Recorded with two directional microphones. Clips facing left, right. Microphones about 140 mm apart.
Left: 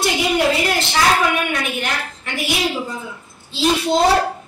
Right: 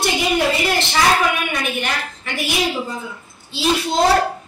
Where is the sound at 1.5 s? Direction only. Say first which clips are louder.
Even; centre (ahead or behind).